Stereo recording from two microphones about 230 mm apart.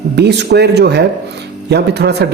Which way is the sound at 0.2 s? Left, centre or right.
Right.